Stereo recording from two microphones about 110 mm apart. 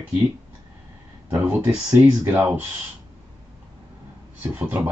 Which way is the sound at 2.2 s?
15° right (ahead or behind).